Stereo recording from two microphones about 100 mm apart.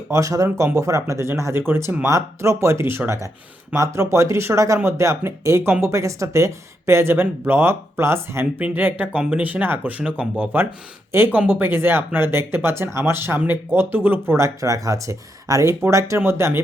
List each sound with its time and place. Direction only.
0.1 s speech: 35° right (ahead or behind)